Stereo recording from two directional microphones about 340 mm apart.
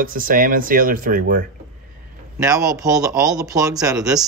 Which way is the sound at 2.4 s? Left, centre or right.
Centre.